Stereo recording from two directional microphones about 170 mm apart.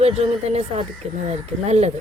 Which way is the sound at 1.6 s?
40° right (ahead or behind).